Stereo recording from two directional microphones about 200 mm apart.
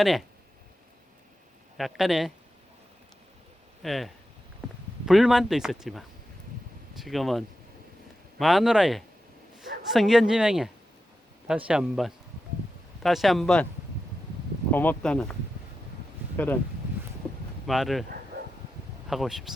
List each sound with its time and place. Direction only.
0.0 s speech: centre (ahead or behind)
1.8 s speech: centre (ahead or behind)
3.8 s speech: centre (ahead or behind)
14.7 s speech: 10° left (ahead or behind)
17.7 s speech: centre (ahead or behind)
18.3 s dog: 55° right (ahead or behind)
19.0 s speech: centre (ahead or behind)